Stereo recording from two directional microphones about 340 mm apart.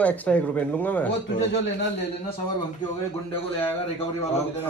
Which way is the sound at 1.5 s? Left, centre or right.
Left.